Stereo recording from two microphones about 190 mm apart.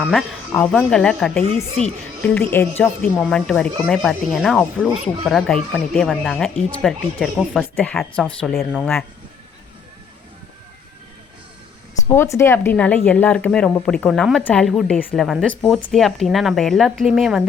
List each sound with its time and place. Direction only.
0.0 s speech: centre (ahead or behind)
1.5 s speech: 35° right (ahead or behind)
2.2 s speech: 10° left (ahead or behind)
11.9 s speech: 15° left (ahead or behind); by 17.4 s centre (ahead or behind)